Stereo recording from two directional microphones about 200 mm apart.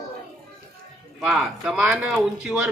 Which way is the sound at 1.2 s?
Centre (ahead or behind).